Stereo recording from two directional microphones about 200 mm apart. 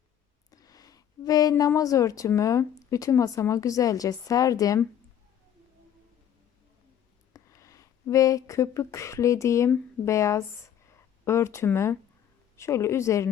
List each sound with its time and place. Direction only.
0.5 s speech: 20° left (ahead or behind)
7.3 s speech: 15° left (ahead or behind)